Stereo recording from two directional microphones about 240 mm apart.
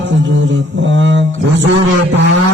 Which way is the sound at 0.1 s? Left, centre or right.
Right.